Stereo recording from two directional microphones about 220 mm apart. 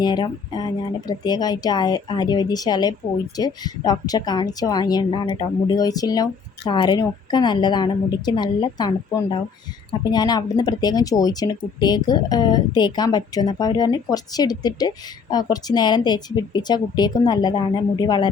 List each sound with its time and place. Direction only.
0.0 s speech: 20° left (ahead or behind)